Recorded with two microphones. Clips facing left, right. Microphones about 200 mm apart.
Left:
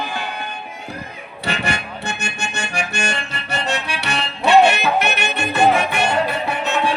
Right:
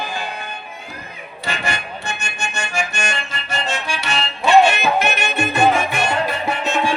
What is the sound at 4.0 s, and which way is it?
Music, 65° left (ahead or behind).